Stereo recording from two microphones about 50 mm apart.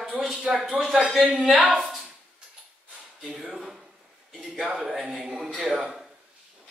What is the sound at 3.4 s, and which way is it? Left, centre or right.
Speech, centre.